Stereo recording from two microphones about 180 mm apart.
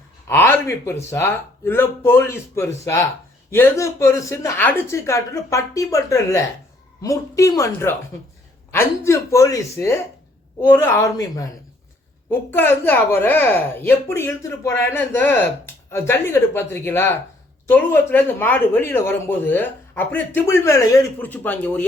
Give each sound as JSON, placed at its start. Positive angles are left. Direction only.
{"t": 0.3, "sound": "a woman's voice", "side_deg": 10}